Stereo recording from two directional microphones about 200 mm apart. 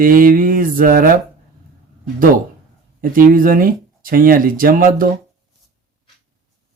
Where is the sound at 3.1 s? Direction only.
45° right (ahead or behind).